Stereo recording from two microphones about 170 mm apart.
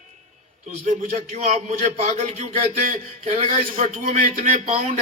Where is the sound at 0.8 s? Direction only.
45° right (ahead or behind).